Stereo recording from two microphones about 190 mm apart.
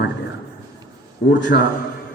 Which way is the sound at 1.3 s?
70° left (ahead or behind).